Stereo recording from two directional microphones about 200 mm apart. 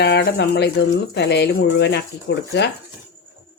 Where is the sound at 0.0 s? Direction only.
55° left (ahead or behind).